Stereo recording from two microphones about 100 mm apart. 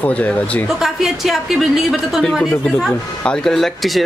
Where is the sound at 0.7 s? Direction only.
Centre (ahead or behind).